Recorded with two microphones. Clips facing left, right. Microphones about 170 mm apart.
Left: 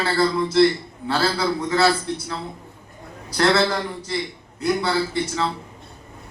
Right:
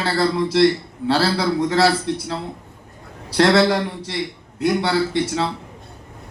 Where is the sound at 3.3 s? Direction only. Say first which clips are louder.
Right 4 dB; 70° right (ahead or behind).